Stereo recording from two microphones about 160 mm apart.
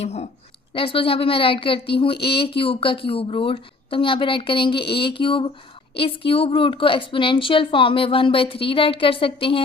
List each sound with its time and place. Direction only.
0.0 s a woman's voice: 40° left (ahead or behind)